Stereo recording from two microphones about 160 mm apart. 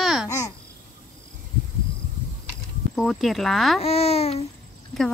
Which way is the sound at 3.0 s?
Centre (ahead or behind).